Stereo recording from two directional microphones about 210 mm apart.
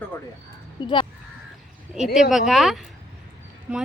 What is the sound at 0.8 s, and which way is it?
Speech, 20° left (ahead or behind).